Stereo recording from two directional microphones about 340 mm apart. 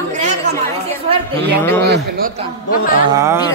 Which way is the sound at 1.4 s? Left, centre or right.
Centre.